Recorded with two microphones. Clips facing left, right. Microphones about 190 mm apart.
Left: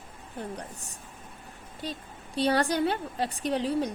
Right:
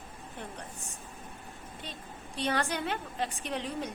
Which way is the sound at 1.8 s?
35° left (ahead or behind).